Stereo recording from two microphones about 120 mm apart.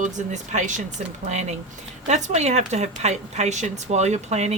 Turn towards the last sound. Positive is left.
turn(degrees=-65)  # may be behind; listen again after turning